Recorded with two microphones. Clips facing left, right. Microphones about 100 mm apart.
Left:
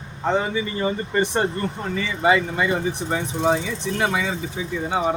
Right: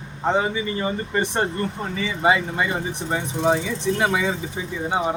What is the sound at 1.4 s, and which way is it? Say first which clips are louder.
Speech: left 1 dB; 15° right (ahead or behind).